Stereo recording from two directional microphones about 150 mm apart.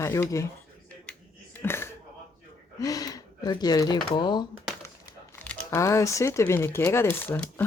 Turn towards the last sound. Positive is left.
turn(degrees=15)  # may be behind; listen again after turning